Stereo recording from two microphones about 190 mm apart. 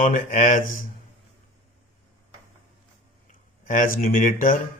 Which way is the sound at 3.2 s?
40° left (ahead or behind).